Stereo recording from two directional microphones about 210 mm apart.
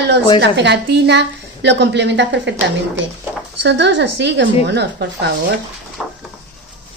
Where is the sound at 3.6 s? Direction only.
55° right (ahead or behind).